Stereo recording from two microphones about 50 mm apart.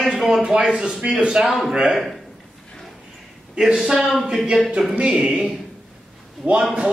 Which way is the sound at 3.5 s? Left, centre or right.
Centre.